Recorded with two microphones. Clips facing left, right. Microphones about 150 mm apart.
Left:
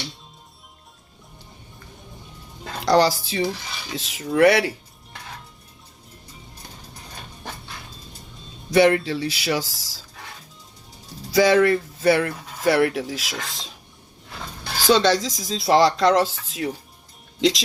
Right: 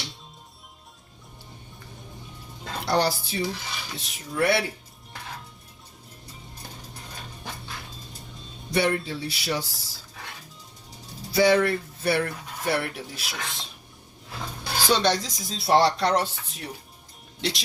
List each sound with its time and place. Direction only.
2.8 s speech: 90° left
8.7 s speech: 90° left
11.3 s speech: 90° left
14.8 s speech: 90° left